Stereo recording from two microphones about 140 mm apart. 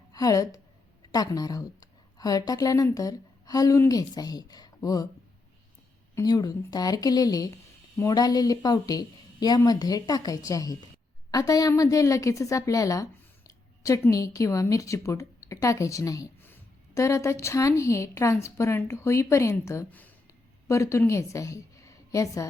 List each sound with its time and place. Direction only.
0.1 s a woman's voice: 25° left (ahead or behind)
6.1 s a woman's voice: 25° left (ahead or behind)